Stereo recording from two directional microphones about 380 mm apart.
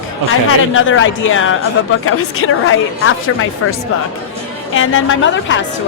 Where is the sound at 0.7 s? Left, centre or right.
Left.